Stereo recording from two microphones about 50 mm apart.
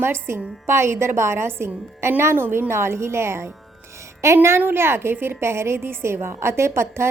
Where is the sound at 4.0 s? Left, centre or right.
Right.